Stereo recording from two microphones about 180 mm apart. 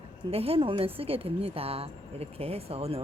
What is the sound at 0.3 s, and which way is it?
A woman's voice, 35° right (ahead or behind).